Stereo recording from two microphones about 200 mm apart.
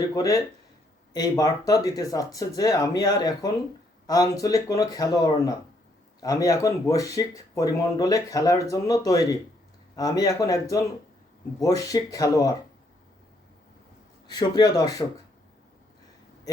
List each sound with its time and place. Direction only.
0.1 s speech: 15° left (ahead or behind)
14.3 s speech: 20° left (ahead or behind)